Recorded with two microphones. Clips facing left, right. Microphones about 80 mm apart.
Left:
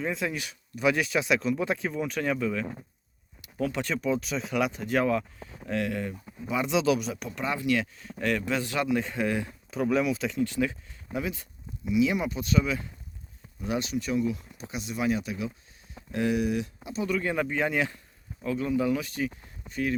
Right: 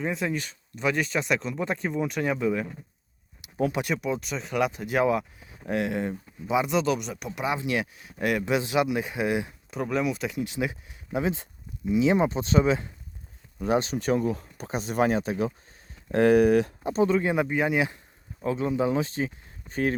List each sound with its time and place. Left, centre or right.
0.0 s speech: centre
2.3 s speech: centre
6.6 s speech: centre
7.3 s speech: centre
9.6 s speech: centre
10.4 s speech: centre; by 17.1 s right
17.1 s speech: right
18.4 s speech: right